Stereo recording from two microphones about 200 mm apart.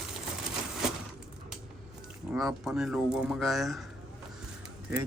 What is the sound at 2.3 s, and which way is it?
Speech, 5° right (ahead or behind).